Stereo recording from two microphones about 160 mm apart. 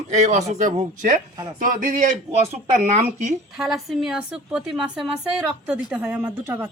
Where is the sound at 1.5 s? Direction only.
55° right (ahead or behind).